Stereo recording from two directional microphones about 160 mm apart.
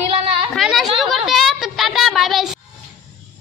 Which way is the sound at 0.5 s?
Centre (ahead or behind).